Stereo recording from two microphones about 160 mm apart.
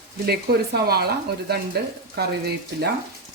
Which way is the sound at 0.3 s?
80° right.